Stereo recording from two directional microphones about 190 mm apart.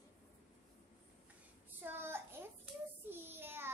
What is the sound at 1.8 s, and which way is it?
Child singing, 10° right (ahead or behind).